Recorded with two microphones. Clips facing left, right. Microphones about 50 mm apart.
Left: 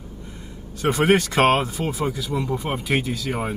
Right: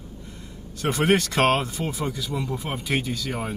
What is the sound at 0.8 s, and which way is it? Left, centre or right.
Speech, centre.